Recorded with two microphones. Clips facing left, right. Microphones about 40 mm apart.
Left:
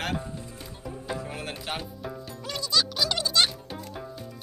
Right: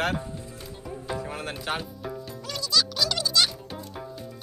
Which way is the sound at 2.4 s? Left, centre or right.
Left.